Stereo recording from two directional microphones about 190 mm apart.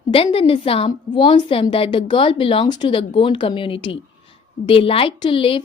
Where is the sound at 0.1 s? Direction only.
30° left (ahead or behind).